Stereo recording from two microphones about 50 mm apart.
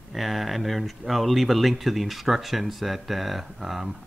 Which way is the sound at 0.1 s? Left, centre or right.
Centre.